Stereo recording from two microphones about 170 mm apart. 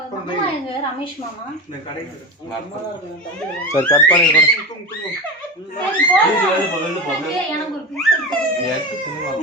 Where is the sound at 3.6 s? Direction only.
15° left (ahead or behind).